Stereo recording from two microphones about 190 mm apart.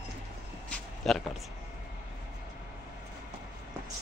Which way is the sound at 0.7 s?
5° left (ahead or behind).